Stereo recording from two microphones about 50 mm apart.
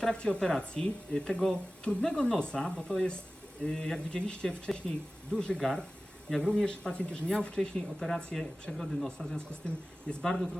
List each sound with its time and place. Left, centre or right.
0.0 s speech: centre
5.5 s speech: centre
7.9 s speech: centre
9.0 s speech: centre
10.2 s speech: centre